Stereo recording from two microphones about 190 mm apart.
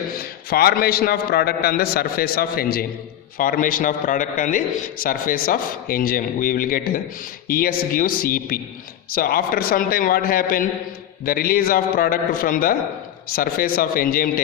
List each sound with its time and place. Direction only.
0.5 s a man's voice: 55° left (ahead or behind)